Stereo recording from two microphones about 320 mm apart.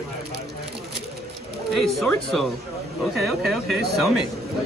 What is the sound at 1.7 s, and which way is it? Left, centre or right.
Speech, centre.